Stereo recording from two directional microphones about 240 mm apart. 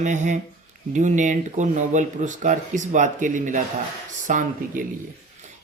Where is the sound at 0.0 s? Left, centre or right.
Right.